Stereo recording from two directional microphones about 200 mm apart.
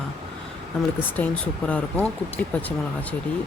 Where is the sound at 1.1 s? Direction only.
10° left (ahead or behind).